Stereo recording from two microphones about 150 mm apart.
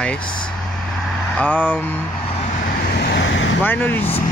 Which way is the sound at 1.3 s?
10° left (ahead or behind).